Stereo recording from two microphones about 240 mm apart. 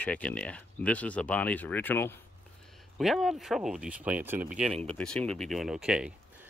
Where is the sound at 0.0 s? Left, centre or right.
Centre.